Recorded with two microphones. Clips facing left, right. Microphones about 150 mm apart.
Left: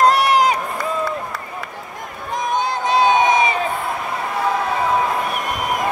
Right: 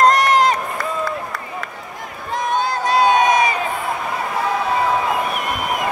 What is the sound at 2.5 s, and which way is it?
Crowd, 20° left (ahead or behind).